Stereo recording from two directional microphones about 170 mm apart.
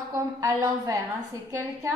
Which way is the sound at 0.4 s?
20° right (ahead or behind).